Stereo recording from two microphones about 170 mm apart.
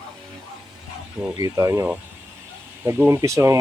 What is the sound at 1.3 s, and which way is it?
Speech, 20° right (ahead or behind).